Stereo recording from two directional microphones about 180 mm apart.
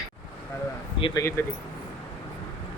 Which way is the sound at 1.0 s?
30° left (ahead or behind).